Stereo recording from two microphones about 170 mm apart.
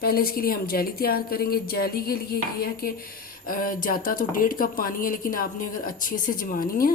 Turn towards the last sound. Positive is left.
turn(degrees=55)  # may be behind; listen again after turning